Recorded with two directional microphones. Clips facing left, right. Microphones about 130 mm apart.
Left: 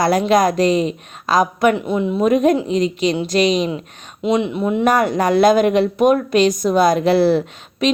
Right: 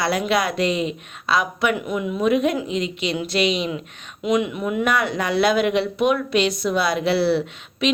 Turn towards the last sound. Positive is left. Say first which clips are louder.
# left 3 dB
turn(degrees=45)  # may be behind; listen again after turning